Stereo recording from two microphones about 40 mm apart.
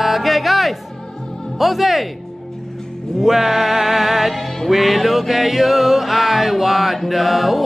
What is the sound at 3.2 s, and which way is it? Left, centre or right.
Music, centre.